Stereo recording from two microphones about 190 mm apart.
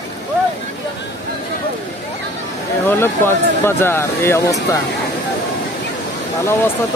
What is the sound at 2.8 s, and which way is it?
Speech, 10° left (ahead or behind).